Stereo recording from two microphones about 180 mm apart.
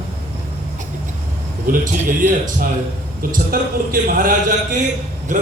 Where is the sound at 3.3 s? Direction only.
50° right (ahead or behind).